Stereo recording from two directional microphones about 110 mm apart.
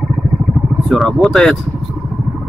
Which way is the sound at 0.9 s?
Centre (ahead or behind).